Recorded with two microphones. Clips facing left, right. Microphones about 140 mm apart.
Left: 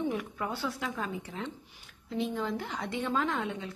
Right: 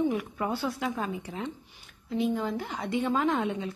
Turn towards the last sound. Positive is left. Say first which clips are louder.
# right 4 dB
turn(degrees=-20)  # may be behind; listen again after turning